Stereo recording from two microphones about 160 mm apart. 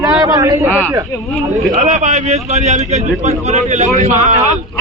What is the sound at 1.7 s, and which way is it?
A man's voice, 50° right (ahead or behind).